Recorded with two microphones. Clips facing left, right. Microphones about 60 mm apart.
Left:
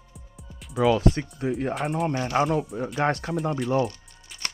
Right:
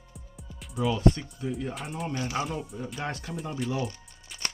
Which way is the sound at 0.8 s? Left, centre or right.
Left.